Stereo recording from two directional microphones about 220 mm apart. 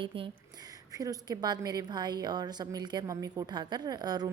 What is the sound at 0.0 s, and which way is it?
A woman's voice, 25° right (ahead or behind).